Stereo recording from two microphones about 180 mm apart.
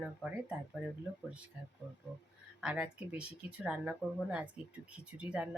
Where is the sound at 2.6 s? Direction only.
5° right (ahead or behind).